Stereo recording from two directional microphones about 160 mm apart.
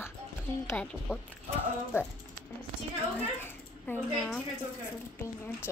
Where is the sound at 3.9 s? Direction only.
10° left (ahead or behind).